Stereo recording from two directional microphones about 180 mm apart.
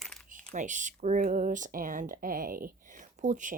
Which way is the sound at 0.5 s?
45° right (ahead or behind).